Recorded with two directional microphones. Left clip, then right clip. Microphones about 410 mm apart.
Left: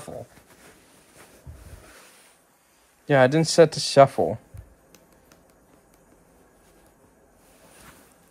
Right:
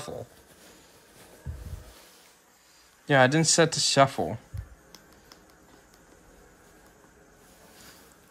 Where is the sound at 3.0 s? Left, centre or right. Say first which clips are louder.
Left 2 dB; centre.